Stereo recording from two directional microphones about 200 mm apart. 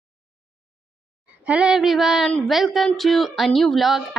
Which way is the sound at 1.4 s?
5° right (ahead or behind).